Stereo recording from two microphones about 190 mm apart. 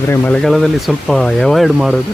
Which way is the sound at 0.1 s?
5° left (ahead or behind).